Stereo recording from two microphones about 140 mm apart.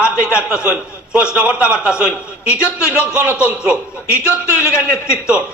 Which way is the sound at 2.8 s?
20° left (ahead or behind).